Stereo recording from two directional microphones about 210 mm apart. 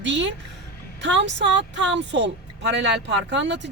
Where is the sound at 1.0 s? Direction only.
60° right (ahead or behind).